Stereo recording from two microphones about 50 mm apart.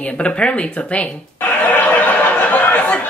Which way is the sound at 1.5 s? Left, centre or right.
Left.